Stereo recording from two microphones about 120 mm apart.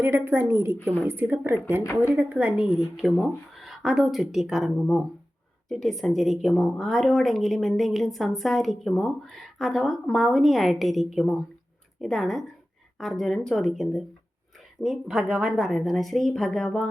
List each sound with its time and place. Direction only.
0.0 s a woman's voice: 20° right (ahead or behind); by 16.9 s 5° left (ahead or behind)